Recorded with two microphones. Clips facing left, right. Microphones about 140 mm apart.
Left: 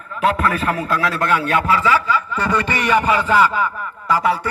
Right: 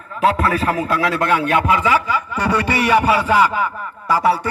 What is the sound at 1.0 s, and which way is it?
A man's voice, 15° right (ahead or behind).